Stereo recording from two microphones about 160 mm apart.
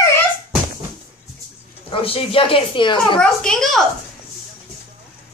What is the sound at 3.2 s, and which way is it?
Speech, 5° left (ahead or behind).